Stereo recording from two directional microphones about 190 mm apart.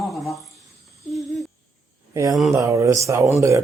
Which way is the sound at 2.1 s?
15° right (ahead or behind).